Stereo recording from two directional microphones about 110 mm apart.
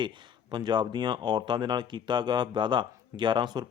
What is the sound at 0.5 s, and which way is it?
Speech, 40° right (ahead or behind).